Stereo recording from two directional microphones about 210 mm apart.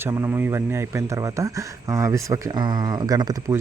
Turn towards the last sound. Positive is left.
turn(degrees=-20)  # may be behind; listen again after turning